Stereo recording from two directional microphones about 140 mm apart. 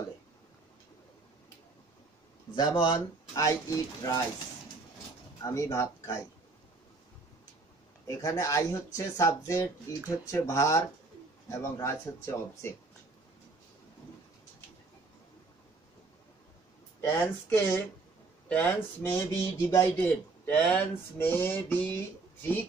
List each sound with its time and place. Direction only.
2.8 s speech: 30° left (ahead or behind)
5.4 s speech: 20° left (ahead or behind)
8.1 s speech: 20° left (ahead or behind)
17.0 s speech: 20° left (ahead or behind)